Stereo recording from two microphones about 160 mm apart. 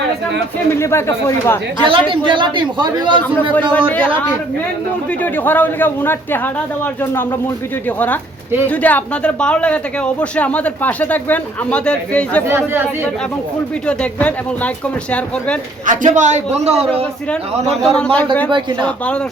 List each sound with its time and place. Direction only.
0.7 s speech: 15° left (ahead or behind)
1.9 s speech: 30° right (ahead or behind)
3.5 s speech: 10° left (ahead or behind)
5.2 s speech: 10° left (ahead or behind)
12.5 s speech: 15° right (ahead or behind)
13.8 s speech: 10° left (ahead or behind)
15.9 s a man's voice: 50° right (ahead or behind)
17.8 s speech: 5° left (ahead or behind)